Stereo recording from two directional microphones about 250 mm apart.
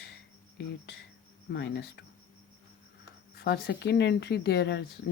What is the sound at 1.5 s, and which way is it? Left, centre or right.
Speech, left.